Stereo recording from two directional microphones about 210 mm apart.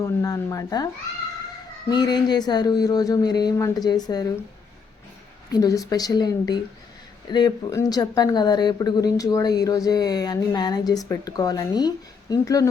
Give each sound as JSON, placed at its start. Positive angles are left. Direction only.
{"t": 0.0, "sound": "speech", "side_deg": 15}
{"t": 1.9, "sound": "speech", "side_deg": 20}
{"t": 5.5, "sound": "speech", "side_deg": 15}